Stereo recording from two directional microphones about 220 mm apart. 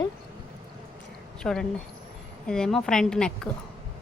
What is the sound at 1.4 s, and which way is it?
A woman's voice, 5° left (ahead or behind).